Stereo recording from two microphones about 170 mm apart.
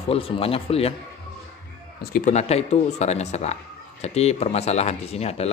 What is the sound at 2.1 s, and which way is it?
Speech, 45° left (ahead or behind).